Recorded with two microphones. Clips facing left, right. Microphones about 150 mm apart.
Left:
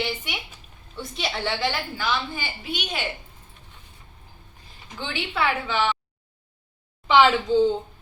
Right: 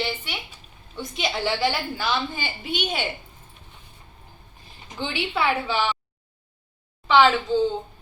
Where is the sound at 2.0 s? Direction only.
20° right (ahead or behind).